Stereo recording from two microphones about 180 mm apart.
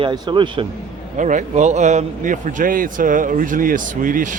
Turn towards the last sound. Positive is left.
turn(degrees=-45)  # may be behind; listen again after turning